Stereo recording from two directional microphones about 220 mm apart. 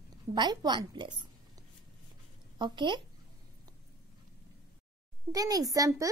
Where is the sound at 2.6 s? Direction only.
20° right (ahead or behind).